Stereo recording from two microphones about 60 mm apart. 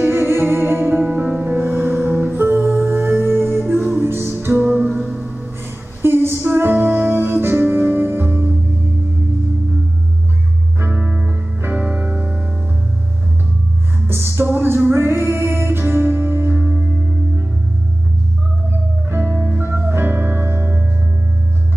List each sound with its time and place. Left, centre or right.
0.1 s music: right
4.8 s music: centre
5.2 s music: centre
6.0 s female singing: right
6.4 s music: right
10.9 s music: centre
14.0 s music: right
19.0 s music: right